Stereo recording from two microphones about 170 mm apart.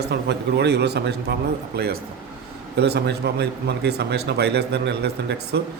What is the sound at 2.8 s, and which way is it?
Speech, 80° right.